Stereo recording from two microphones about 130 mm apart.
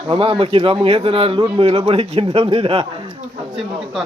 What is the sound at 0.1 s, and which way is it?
A man's voice, 45° right (ahead or behind).